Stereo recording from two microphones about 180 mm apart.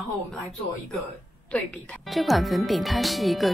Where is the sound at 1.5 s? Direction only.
5° left (ahead or behind).